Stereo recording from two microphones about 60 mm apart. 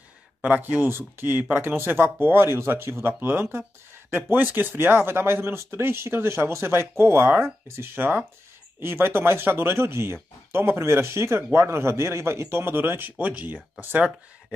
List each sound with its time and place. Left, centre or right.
0.4 s speech: right